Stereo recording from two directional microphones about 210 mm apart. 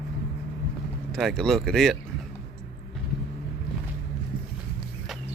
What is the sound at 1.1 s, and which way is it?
Speech, centre (ahead or behind).